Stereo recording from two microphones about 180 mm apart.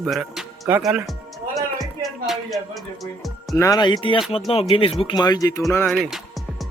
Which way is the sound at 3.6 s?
20° left (ahead or behind).